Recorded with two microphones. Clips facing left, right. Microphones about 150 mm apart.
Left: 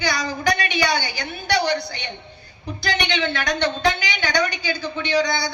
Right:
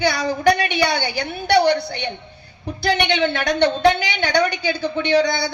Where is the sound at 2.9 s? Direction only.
60° right (ahead or behind).